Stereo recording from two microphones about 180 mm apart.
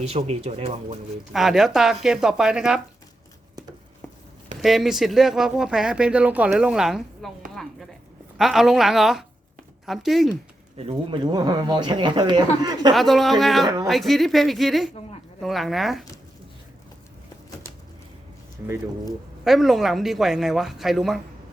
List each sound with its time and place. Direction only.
0.0 s speech: 35° right (ahead or behind)
1.3 s speech: centre (ahead or behind)
4.6 s speech: centre (ahead or behind)
7.5 s a sound: centre (ahead or behind)
8.4 s speech: centre (ahead or behind)
10.8 s speech: 30° right (ahead or behind)
12.9 s speech: centre (ahead or behind)
19.5 s speech: centre (ahead or behind)